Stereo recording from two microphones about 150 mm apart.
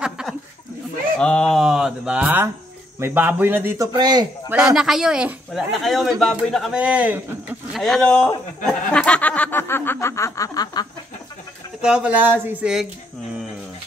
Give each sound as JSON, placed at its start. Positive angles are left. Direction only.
{"t": 0.0, "sound": "a sound", "side_deg": -5}
{"t": 1.1, "sound": "speech", "side_deg": 5}
{"t": 4.7, "sound": "speech", "side_deg": -5}
{"t": 7.8, "sound": "speech", "side_deg": 5}
{"t": 8.6, "sound": "snicker", "side_deg": 5}
{"t": 11.8, "sound": "speech", "side_deg": -5}